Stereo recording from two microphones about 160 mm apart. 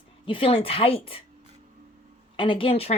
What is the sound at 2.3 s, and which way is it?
Speech, 30° left (ahead or behind).